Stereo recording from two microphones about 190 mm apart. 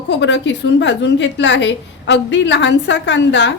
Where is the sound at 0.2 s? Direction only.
70° left (ahead or behind).